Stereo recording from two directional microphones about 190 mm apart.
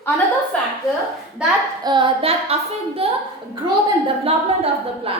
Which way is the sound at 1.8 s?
25° right (ahead or behind).